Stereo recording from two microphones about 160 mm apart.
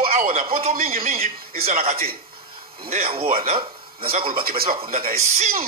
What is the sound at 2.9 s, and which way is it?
Speech, 40° right (ahead or behind).